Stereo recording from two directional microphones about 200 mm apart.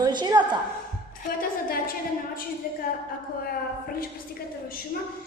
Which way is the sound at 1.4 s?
45° left (ahead or behind).